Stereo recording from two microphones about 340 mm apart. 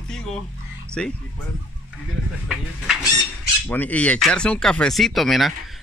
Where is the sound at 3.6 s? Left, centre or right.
Centre.